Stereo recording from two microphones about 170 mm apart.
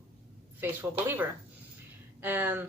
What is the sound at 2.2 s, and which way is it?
Speech, 10° right (ahead or behind).